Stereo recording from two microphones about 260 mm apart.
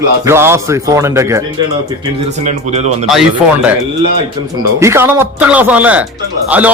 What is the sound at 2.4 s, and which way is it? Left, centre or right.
Speech, right.